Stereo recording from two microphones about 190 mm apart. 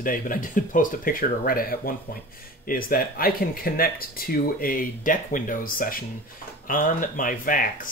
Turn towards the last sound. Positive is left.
turn(degrees=45)  # may be behind; listen again after turning